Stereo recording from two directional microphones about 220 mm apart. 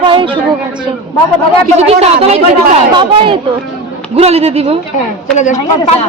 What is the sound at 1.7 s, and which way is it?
A woman's voice, 30° right (ahead or behind).